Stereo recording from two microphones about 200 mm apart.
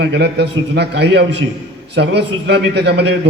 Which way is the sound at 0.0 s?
55° right (ahead or behind).